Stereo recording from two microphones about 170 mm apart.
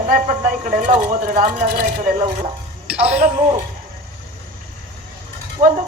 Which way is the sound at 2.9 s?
5° right (ahead or behind).